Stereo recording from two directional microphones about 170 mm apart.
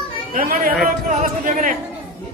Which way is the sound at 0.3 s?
60° right (ahead or behind).